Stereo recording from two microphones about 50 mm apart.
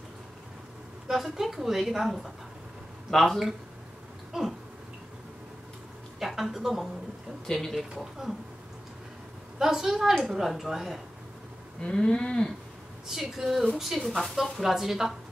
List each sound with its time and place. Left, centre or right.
1.0 s a woman's voice: centre
4.3 s a sound: centre
6.1 s a woman's voice: centre
9.6 s a woman's voice: centre
11.8 s livestock: centre
13.0 s a woman's voice: centre